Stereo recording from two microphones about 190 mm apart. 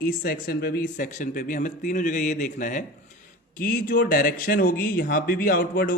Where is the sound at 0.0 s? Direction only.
50° left (ahead or behind).